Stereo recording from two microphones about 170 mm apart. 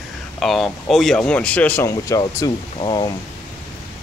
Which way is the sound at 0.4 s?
Centre (ahead or behind).